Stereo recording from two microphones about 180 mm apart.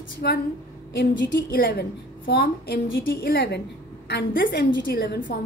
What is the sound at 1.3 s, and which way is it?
A woman's voice, 60° left (ahead or behind).